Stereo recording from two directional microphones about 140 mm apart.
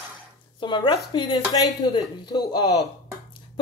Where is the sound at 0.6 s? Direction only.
35° left (ahead or behind).